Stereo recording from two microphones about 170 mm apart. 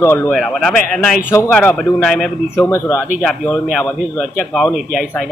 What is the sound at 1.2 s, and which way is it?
Speech, 15° left (ahead or behind).